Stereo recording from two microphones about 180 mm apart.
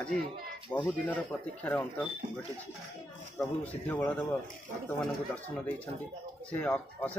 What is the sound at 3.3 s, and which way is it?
A man's voice, 10° left (ahead or behind).